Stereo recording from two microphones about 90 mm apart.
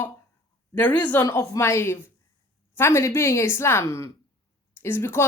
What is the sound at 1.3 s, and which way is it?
A woman's voice, 35° left (ahead or behind).